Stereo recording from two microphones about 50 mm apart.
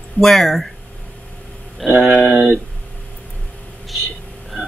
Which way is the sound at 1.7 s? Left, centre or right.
Centre.